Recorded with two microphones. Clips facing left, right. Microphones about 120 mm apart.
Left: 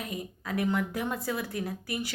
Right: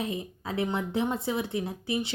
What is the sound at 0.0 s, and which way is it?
A woman's voice, 25° right (ahead or behind).